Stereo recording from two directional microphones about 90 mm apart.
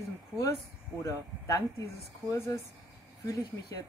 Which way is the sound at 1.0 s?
35° left (ahead or behind).